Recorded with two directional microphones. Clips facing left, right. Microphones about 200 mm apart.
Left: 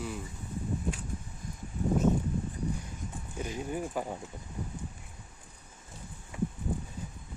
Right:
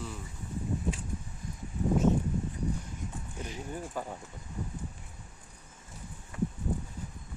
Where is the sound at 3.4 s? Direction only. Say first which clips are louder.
Left 5 dB; 10° left (ahead or behind).